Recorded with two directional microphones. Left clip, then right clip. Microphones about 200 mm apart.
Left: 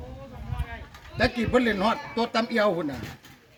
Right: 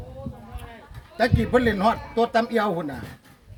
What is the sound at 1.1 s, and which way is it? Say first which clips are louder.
A man's voice: right 2 dB; 50° right (ahead or behind).